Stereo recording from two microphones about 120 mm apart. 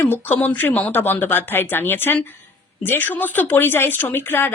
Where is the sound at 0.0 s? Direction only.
15° left (ahead or behind).